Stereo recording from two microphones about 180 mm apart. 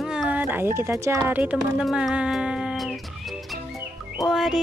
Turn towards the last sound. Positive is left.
turn(degrees=0)  # may be behind; listen again after turning